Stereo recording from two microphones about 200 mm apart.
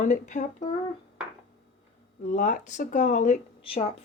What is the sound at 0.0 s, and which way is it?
Speech, 40° left (ahead or behind).